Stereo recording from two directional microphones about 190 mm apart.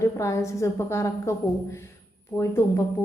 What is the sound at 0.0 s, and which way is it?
A man's voice, 15° left (ahead or behind).